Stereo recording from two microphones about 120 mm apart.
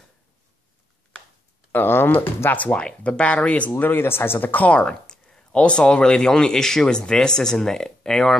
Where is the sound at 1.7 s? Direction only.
15° left (ahead or behind).